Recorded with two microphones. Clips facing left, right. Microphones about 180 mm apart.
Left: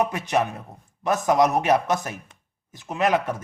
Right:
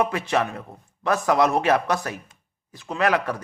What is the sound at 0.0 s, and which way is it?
A man's voice, 20° left (ahead or behind).